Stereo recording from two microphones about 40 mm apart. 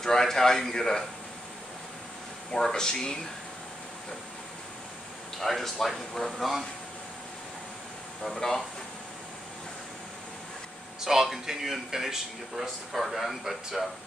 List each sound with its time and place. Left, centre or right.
0.0 s a man's voice: centre
2.5 s a man's voice: centre
5.4 s speech: centre
8.2 s a man's voice: centre
11.1 s speech: centre